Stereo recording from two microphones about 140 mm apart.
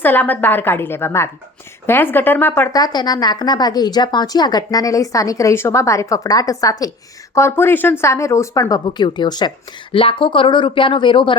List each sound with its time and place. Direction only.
0.0 s a woman's voice: 15° left (ahead or behind)
2.7 s a woman's voice: 30° left (ahead or behind)
9.9 s speech: 40° left (ahead or behind)